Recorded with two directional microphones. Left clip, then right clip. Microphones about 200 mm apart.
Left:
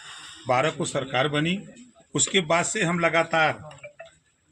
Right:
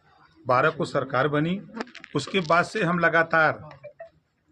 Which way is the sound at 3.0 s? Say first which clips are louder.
Right 2 dB; 20° right (ahead or behind).